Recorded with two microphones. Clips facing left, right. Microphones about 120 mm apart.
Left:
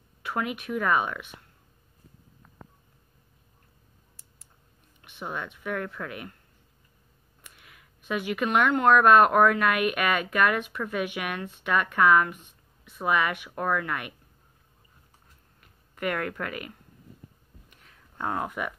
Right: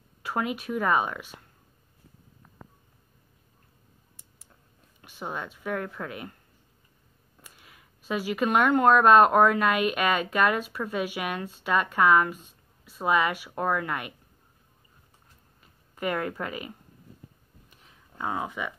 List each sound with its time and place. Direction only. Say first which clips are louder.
0.4 s speech: right 1 dB; 30° right (ahead or behind)
5.2 s speech: even; 25° right (ahead or behind)
7.4 s speech: even; 30° right (ahead or behind)
15.6 s speech: even; 30° right (ahead or behind)
18.1 s speech: left 1 dB; 5° right (ahead or behind)
18.5 s speech: left 1 dB; 5° left (ahead or behind)